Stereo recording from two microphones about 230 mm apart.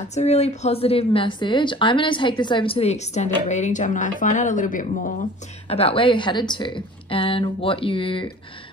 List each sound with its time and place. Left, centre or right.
0.1 s speech: left
5.7 s speech: left